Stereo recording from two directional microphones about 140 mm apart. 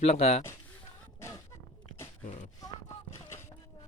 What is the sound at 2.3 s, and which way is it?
Speech, 55° left (ahead or behind).